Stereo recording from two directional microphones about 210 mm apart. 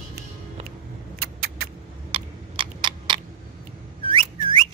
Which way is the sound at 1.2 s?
45° right (ahead or behind).